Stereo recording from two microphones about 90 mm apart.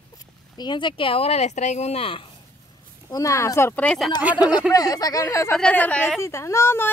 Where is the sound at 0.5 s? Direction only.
60° left (ahead or behind); by 2.3 s 90° left.